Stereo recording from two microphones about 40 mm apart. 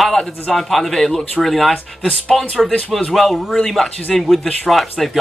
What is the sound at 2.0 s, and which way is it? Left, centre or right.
Speech, left.